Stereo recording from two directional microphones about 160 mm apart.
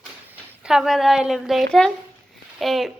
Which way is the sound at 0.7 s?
Centre (ahead or behind).